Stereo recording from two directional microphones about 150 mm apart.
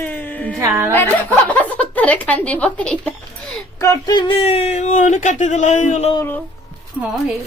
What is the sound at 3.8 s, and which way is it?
Speech, 25° left (ahead or behind).